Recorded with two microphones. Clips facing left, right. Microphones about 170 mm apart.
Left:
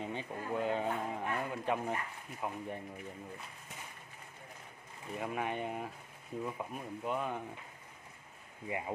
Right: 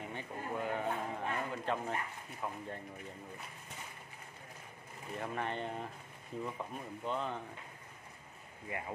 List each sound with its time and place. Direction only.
0.0 s a sound: 20° left (ahead or behind)
2.4 s speech: 15° left (ahead or behind)
5.1 s speech: 5° left (ahead or behind)
8.6 s speech: 20° left (ahead or behind)